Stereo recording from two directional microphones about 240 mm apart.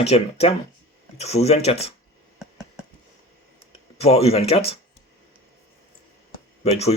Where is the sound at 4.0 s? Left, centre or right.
Left.